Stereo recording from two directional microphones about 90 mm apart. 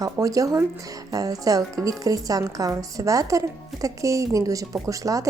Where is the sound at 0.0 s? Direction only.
40° right (ahead or behind).